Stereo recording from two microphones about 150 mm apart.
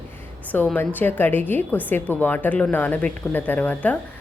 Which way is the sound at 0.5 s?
10° left (ahead or behind).